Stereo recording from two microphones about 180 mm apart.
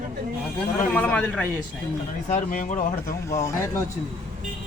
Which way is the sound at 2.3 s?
45° left (ahead or behind).